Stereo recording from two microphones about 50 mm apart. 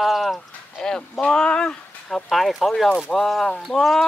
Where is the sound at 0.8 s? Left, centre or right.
Centre.